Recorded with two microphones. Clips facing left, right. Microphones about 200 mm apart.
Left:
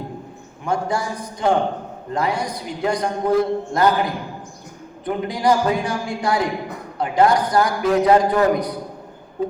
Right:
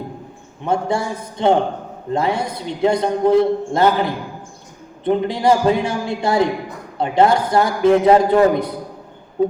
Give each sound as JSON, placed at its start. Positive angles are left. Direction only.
{"t": 0.6, "sound": "a man's voice", "side_deg": -25}